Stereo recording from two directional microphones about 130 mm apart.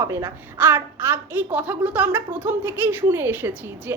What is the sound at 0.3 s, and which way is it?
A woman's voice, 15° right (ahead or behind).